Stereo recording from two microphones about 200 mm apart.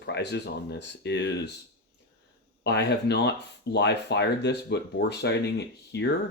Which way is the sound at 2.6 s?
55° left (ahead or behind).